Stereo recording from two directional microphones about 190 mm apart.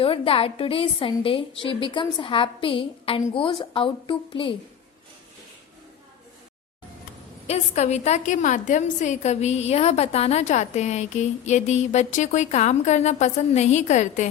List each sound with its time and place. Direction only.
0.0 s a woman's voice: 30° left (ahead or behind)
7.4 s a woman's voice: 35° left (ahead or behind)